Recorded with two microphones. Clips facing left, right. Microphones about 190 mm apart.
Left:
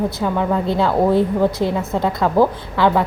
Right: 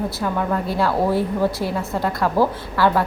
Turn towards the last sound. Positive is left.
turn(degrees=20)  # may be behind; listen again after turning